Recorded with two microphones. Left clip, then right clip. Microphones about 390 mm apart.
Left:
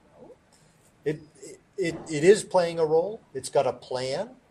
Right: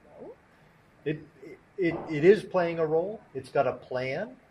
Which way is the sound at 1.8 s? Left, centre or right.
Left.